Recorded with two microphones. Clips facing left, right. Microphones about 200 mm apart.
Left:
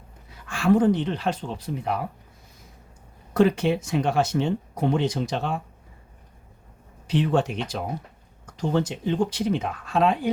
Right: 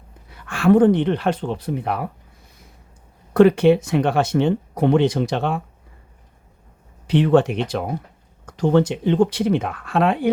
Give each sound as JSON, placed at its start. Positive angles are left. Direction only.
{"t": 0.3, "sound": "speech", "side_deg": -60}
{"t": 3.3, "sound": "speech", "side_deg": -65}
{"t": 7.1, "sound": "speech", "side_deg": -65}